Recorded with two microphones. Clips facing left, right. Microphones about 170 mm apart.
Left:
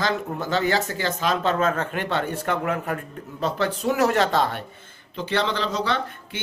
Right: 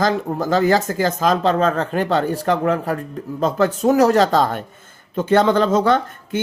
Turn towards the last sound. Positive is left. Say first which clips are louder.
# right 9 dB
turn(degrees=-45)  # may be behind; listen again after turning